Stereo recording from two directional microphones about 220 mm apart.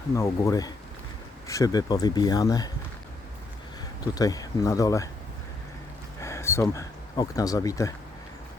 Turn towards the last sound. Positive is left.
turn(degrees=15)  # may be behind; listen again after turning